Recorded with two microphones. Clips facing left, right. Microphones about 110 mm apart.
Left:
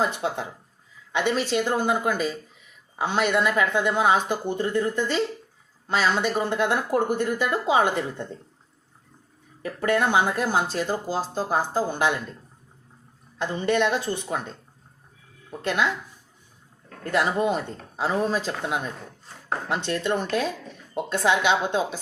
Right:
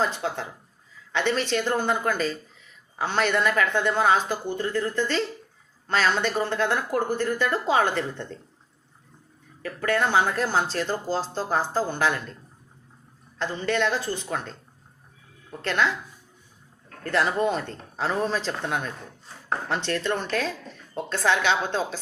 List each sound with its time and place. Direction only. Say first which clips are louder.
0.0 s a woman's voice: left 1 dB; 20° left (ahead or behind)
9.6 s speech: left 2 dB; 20° left (ahead or behind)
13.4 s a woman's voice: left 2 dB; 20° left (ahead or behind)
15.4 s speech: even; 10° left (ahead or behind)
17.0 s speech: even; 15° left (ahead or behind)